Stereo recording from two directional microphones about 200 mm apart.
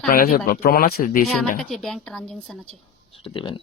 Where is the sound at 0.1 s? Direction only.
45° left (ahead or behind).